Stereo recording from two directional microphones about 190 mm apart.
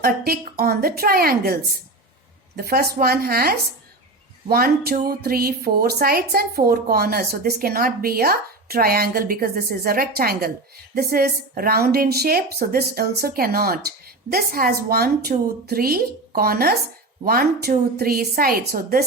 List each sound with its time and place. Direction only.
0.0 s speech: 50° right (ahead or behind)
2.6 s speech: 50° right (ahead or behind)